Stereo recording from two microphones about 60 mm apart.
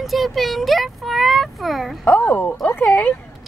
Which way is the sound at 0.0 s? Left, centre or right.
Centre.